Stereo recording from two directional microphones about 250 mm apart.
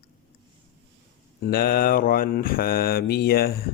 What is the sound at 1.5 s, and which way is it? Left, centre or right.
Mantra, left.